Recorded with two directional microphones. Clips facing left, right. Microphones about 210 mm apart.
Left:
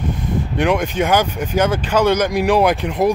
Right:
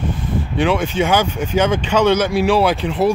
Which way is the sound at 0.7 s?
15° left (ahead or behind).